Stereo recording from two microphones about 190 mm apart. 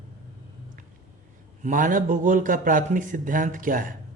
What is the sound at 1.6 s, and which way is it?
Speech, 45° right (ahead or behind).